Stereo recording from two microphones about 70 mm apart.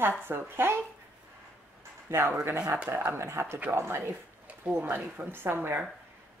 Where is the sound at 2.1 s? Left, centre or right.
Right.